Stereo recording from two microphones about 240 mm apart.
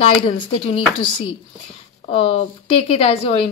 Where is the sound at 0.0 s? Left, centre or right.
Left.